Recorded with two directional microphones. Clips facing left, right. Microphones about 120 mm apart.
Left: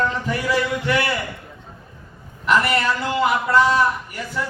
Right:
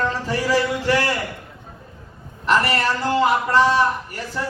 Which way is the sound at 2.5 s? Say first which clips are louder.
Even; 35° right (ahead or behind).